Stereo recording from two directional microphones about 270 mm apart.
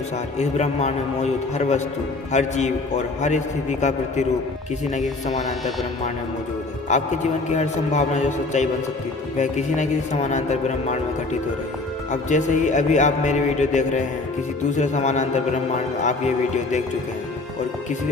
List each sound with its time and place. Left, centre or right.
0.3 s a man's voice: left
6.9 s a man's voice: left
12.1 s a man's voice: left